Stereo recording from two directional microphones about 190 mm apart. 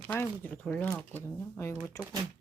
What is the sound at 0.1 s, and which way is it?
Speech, 10° left (ahead or behind).